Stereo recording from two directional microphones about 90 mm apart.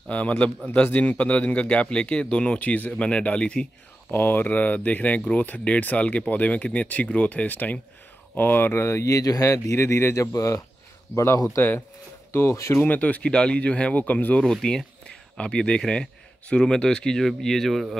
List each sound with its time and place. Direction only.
0.1 s speech: 15° left (ahead or behind)
4.1 s speech: 20° left (ahead or behind)
11.5 s speech: 25° left (ahead or behind)
12.8 s speech: 15° left (ahead or behind)
14.4 s speech: 5° left (ahead or behind)